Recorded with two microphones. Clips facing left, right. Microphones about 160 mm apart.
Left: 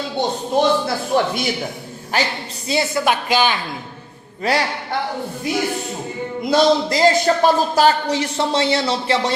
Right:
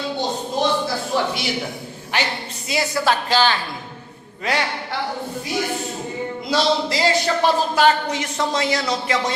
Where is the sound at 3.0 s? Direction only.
15° left (ahead or behind).